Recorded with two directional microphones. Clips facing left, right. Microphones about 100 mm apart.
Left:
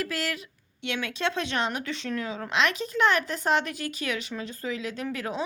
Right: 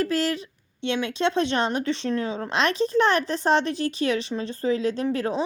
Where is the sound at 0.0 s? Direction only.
30° right (ahead or behind).